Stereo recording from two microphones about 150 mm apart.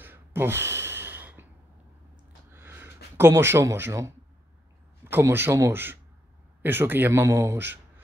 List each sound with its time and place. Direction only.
0.0 s gasp: 15° right (ahead or behind)
2.5 s a sound: 15° right (ahead or behind)
5.1 s a man's voice: 15° right (ahead or behind)